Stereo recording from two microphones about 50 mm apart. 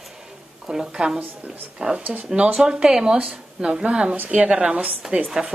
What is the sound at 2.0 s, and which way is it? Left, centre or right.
Speech, right.